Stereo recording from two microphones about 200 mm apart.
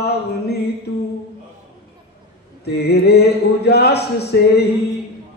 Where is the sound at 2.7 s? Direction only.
55° left (ahead or behind).